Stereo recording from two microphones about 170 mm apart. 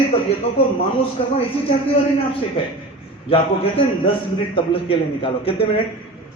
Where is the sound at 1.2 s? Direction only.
35° left (ahead or behind).